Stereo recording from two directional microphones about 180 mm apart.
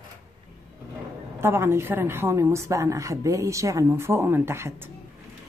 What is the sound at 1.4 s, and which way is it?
A woman's voice, 15° right (ahead or behind).